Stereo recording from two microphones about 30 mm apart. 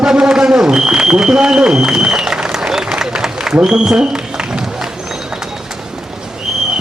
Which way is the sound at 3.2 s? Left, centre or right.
Right.